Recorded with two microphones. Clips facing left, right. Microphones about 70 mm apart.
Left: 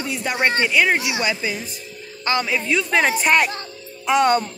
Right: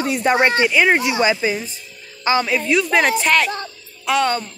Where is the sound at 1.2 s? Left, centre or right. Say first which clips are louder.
Right 5 dB; right.